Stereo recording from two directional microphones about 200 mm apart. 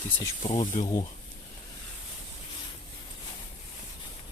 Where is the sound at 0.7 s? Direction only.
40° left (ahead or behind).